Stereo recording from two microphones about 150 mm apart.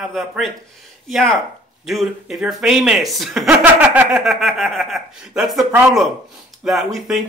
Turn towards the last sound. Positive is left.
turn(degrees=0)  # may be behind; listen again after turning